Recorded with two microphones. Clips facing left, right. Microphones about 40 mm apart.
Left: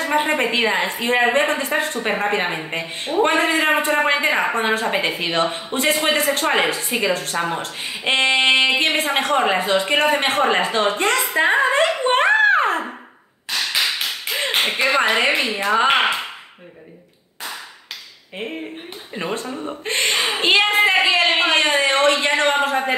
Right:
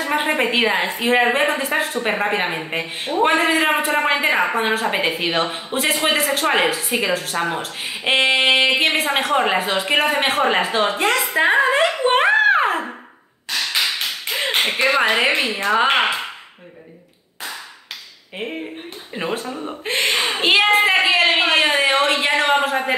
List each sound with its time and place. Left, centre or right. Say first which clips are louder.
0.0 s a woman's voice: even; centre
13.5 s tap: even; centre
18.4 s a woman's voice: right 1 dB; centre